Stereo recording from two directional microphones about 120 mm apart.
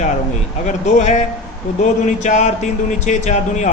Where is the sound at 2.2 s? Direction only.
90° left.